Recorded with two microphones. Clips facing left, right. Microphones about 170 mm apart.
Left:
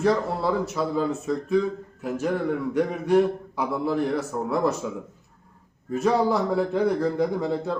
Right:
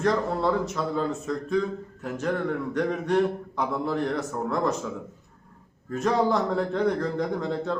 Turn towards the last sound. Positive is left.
turn(degrees=5)  # may be behind; listen again after turning